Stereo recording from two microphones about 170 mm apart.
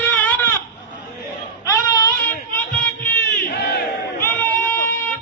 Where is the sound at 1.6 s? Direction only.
20° left (ahead or behind).